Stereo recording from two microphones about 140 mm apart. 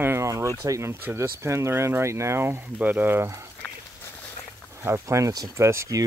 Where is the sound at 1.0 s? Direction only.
15° right (ahead or behind).